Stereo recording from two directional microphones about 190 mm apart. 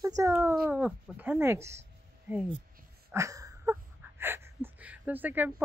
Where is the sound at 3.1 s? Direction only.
15° right (ahead or behind).